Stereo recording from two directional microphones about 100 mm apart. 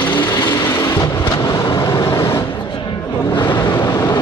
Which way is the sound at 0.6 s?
25° left (ahead or behind).